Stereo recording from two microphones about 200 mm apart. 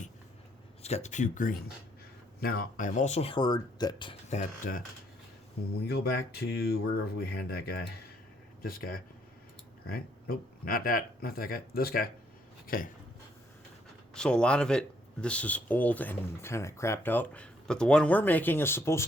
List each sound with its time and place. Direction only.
0.8 s speech: 35° left (ahead or behind)
5.9 s speech: 50° left (ahead or behind)
14.1 s speech: 5° left (ahead or behind)